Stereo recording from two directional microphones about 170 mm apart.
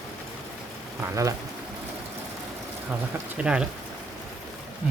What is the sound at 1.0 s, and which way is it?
Speech, 20° right (ahead or behind).